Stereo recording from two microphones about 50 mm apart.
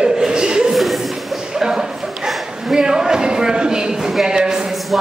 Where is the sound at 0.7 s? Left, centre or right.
Centre.